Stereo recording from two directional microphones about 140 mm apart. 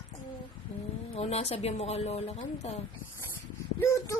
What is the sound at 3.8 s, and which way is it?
Speech, 20° left (ahead or behind).